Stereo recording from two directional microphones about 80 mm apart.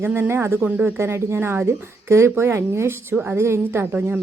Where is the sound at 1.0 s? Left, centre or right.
Right.